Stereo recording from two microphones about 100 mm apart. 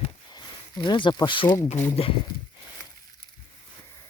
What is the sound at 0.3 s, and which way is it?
Speech, 50° left (ahead or behind).